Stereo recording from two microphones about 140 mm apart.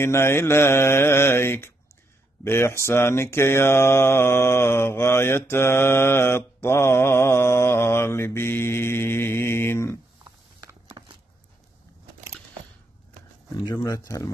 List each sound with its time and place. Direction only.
0.0 s mantra: 20° left (ahead or behind)
11.0 s a sound: 30° right (ahead or behind)
13.7 s speech: 25° left (ahead or behind)